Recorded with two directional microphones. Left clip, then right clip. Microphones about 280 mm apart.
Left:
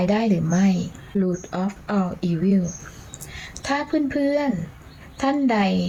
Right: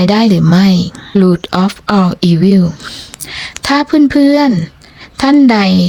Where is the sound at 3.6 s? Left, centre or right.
Right.